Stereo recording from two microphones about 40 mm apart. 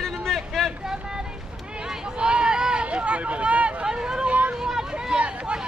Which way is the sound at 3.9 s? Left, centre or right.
Centre.